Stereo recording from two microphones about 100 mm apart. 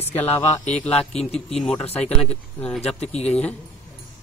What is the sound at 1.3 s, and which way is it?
Mantra, 5° left (ahead or behind).